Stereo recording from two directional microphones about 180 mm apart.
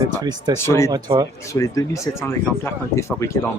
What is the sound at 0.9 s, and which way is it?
Speech, 20° right (ahead or behind).